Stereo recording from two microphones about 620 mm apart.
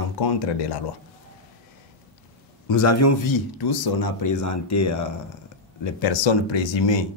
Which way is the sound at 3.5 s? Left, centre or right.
Left.